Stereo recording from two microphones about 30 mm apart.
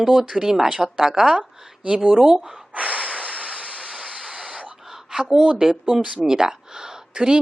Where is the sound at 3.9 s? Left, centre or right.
Right.